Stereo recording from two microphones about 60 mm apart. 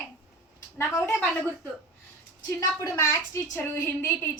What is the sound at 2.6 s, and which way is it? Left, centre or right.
A woman's voice, left.